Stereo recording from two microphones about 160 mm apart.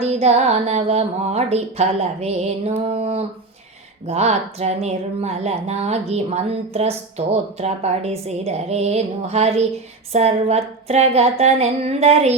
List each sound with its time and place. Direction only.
0.0 s a woman's voice: 45° right (ahead or behind)